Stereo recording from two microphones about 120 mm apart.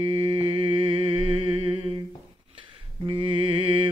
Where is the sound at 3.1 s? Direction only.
45° right (ahead or behind).